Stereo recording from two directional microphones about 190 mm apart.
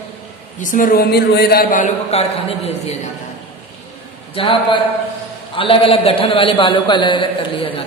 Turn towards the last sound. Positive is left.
turn(degrees=25)  # may be behind; listen again after turning